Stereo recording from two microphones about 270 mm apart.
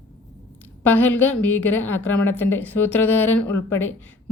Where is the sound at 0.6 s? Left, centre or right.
Centre.